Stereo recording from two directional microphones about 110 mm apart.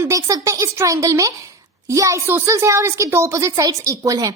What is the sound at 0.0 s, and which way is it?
A child's voice, 30° right (ahead or behind).